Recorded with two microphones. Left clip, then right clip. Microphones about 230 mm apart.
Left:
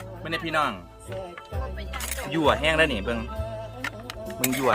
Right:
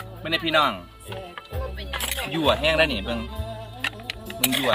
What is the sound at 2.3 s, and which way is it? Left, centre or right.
Speech, centre.